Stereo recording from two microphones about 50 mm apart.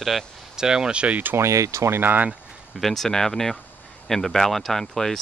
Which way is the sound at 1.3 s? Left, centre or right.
Right.